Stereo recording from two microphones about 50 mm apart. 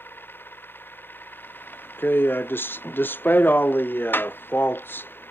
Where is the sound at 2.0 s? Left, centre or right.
Left.